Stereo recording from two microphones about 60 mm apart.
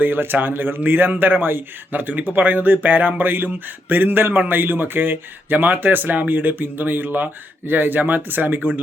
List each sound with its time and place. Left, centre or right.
0.0 s speech: right